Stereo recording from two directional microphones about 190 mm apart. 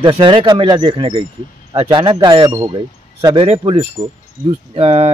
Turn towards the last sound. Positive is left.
turn(degrees=-30)  # may be behind; listen again after turning